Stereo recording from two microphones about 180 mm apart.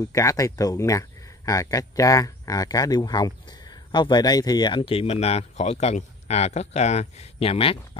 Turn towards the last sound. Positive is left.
turn(degrees=30)  # may be behind; listen again after turning